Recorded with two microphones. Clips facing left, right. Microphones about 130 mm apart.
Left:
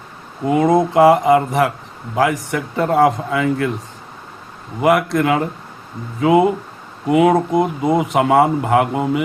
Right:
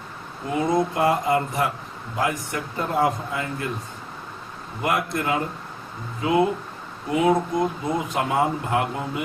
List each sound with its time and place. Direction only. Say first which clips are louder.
0.4 s a man's voice: left 8 dB; 75° left (ahead or behind)
4.8 s speech: left 10 dB; 85° left